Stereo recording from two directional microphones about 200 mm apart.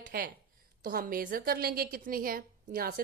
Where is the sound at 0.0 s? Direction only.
45° right (ahead or behind).